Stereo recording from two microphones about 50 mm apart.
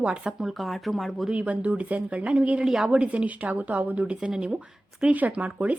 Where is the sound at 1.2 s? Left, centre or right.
Right.